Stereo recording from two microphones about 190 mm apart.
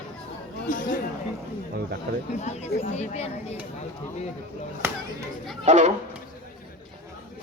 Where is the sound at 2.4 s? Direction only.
35° left (ahead or behind).